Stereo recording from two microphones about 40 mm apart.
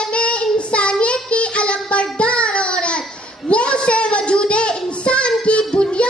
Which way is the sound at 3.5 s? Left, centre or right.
Left.